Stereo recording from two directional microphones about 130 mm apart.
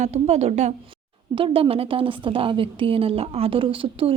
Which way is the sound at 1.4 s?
45° right (ahead or behind).